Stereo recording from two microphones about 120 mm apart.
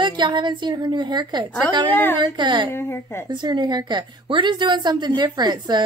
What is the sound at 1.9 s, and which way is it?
Speech, 15° left (ahead or behind).